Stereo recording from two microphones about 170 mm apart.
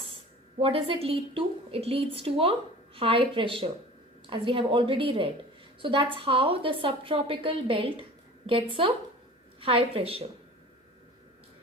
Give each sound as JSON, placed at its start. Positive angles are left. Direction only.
{"t": 0.6, "sound": "a woman's voice", "side_deg": -35}